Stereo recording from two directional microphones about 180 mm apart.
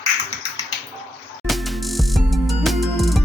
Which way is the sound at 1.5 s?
Centre (ahead or behind).